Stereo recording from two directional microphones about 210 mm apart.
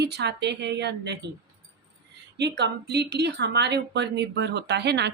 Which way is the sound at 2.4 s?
55° right (ahead or behind).